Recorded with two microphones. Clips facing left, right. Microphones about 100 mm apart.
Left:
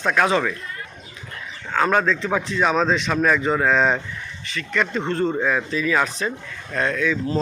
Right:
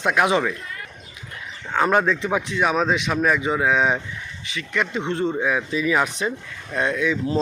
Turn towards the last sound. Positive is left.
turn(degrees=-20)  # may be behind; listen again after turning